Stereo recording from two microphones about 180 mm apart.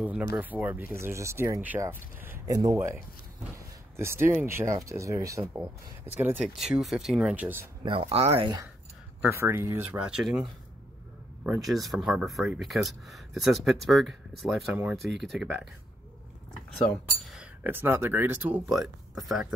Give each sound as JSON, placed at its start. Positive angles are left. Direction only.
{"t": 0.4, "sound": "speech", "side_deg": -10}
{"t": 7.8, "sound": "speech", "side_deg": -30}
{"t": 9.2, "sound": "speech", "side_deg": -15}
{"t": 11.4, "sound": "speech", "side_deg": 0}
{"t": 16.8, "sound": "cutlery", "side_deg": 0}
{"t": 17.6, "sound": "speech", "side_deg": -10}
{"t": 19.1, "sound": "speech", "side_deg": 0}